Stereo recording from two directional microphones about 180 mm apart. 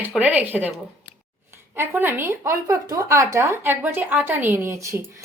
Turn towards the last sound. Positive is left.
turn(degrees=-15)  # may be behind; listen again after turning